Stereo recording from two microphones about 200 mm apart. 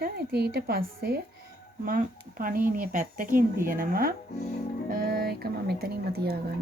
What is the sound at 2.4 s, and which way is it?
A woman's voice, 45° right (ahead or behind).